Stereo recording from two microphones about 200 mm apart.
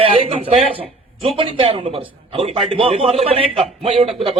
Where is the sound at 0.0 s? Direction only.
25° right (ahead or behind).